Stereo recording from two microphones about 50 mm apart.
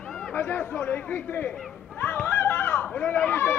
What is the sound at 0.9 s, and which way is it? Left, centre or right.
Chatter, left.